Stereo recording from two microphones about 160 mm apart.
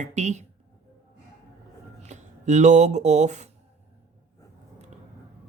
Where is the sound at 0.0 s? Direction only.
45° right (ahead or behind).